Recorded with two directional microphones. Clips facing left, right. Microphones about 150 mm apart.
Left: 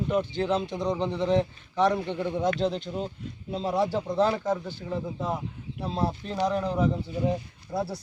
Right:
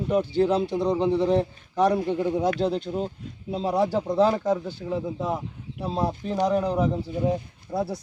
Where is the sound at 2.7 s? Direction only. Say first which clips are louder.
Right 4 dB; 40° right (ahead or behind).